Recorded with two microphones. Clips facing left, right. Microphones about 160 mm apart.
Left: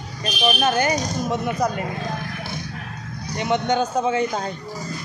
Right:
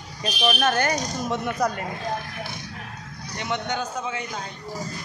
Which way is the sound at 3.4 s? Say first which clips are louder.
Left 7 dB; 20° left (ahead or behind).